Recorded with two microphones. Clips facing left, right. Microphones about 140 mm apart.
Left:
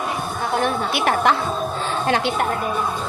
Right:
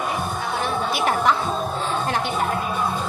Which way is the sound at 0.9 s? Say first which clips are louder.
Even; 75° left (ahead or behind).